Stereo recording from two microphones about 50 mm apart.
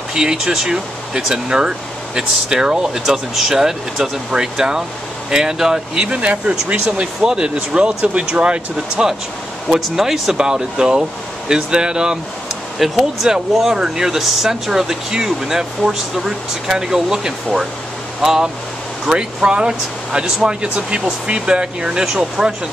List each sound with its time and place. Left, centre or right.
0.1 s speech: centre
9.8 s speech: centre
12.7 s speech: centre